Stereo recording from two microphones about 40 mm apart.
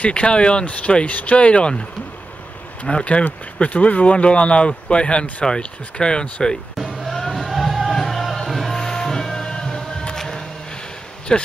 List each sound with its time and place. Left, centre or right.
0.0 s speech: left
3.6 s speech: left
7.1 s music: centre
8.7 s a sound: centre
11.3 s speech: left